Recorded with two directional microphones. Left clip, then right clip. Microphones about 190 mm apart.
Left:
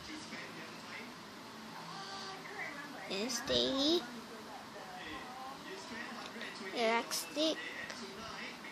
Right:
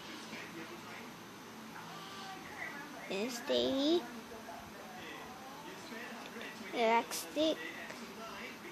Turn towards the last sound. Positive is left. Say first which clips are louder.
# right 1 dB
turn(degrees=-5)  # may be behind; listen again after turning